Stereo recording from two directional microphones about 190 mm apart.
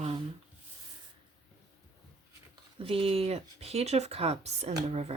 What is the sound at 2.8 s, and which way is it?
Speech, 30° right (ahead or behind).